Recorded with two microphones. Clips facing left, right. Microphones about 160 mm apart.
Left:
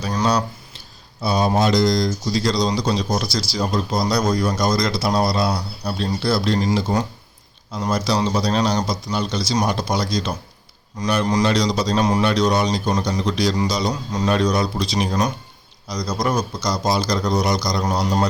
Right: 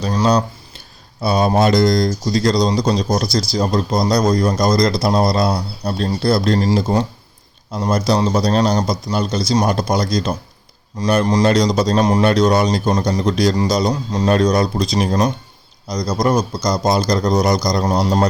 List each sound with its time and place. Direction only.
0.0 s speech: 25° right (ahead or behind)
1.2 s a man's voice: 55° right (ahead or behind)
17.9 s speech: 30° right (ahead or behind)